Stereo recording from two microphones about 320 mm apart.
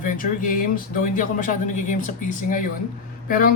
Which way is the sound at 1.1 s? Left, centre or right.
Left.